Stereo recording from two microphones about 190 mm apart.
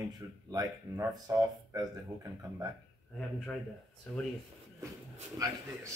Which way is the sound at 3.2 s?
5° left (ahead or behind).